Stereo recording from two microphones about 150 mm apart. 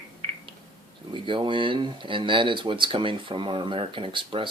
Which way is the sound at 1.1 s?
35° right (ahead or behind).